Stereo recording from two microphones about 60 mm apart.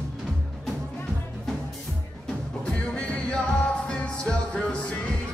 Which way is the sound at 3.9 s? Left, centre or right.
Centre.